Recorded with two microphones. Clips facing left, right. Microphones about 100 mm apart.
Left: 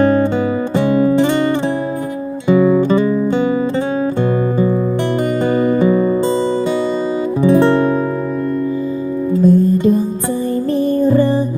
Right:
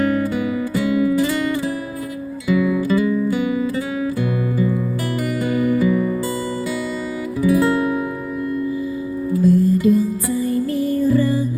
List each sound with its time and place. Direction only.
0.0 s music: 30° left (ahead or behind)
5.5 s music: 30° left (ahead or behind)
7.4 s music: 30° left (ahead or behind)
9.4 s music: 25° left (ahead or behind)